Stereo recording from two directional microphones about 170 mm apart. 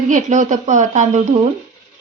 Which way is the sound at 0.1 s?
45° right (ahead or behind).